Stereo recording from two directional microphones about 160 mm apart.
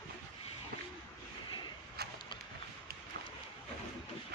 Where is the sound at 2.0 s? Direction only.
80° right.